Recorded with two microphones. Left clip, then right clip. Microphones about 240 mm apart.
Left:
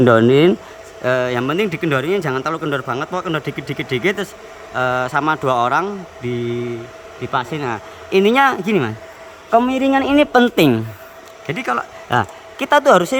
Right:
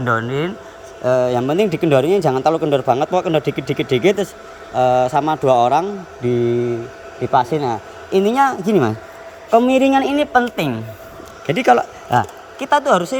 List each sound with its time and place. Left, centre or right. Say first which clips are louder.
0.0 s speech: left 8 dB; left
1.0 s a man's voice: right 2 dB; centre
10.3 s speech: left 4 dB; left
11.4 s speech: right 7 dB; centre
12.5 s speech: left 3 dB; centre